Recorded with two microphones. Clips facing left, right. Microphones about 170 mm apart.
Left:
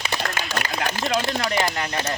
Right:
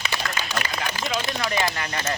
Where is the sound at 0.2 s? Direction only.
45° left (ahead or behind).